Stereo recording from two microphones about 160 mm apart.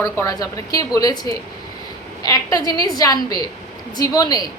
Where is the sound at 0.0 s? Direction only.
20° left (ahead or behind).